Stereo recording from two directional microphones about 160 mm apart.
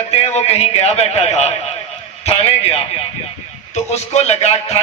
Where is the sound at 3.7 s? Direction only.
45° left (ahead or behind).